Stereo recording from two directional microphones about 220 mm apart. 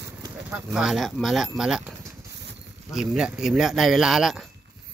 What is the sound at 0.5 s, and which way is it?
Speech, 5° right (ahead or behind).